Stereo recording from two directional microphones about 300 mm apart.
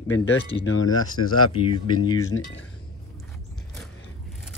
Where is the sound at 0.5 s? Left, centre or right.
Left.